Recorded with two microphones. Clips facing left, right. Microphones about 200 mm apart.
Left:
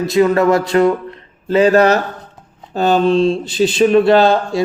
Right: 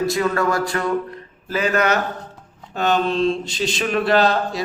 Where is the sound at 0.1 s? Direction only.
20° left (ahead or behind).